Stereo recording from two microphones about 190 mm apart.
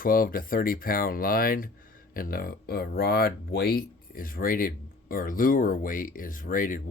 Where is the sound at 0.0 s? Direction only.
50° left (ahead or behind).